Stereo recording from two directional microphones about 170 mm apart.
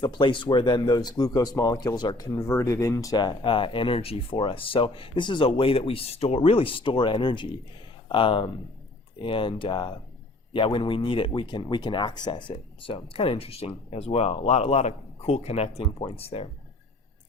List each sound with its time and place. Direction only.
0.0 s speech: 30° left (ahead or behind)